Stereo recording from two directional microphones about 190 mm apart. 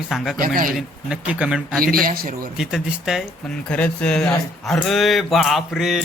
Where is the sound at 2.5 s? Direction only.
5° right (ahead or behind).